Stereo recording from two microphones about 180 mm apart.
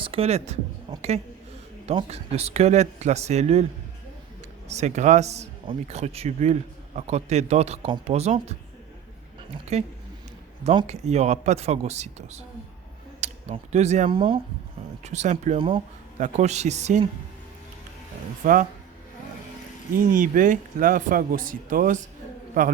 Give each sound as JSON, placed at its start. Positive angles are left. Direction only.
{"t": 0.0, "sound": "speech", "side_deg": -30}
{"t": 0.9, "sound": "speech", "side_deg": -25}
{"t": 1.9, "sound": "speech", "side_deg": -35}
{"t": 4.7, "sound": "speech", "side_deg": -40}
{"t": 9.7, "sound": "speech", "side_deg": -35}
{"t": 14.1, "sound": "speech", "side_deg": -30}
{"t": 15.0, "sound": "speech", "side_deg": -40}
{"t": 16.1, "sound": "speech", "side_deg": -40}
{"t": 18.4, "sound": "speech", "side_deg": -50}
{"t": 20.0, "sound": "speech", "side_deg": -50}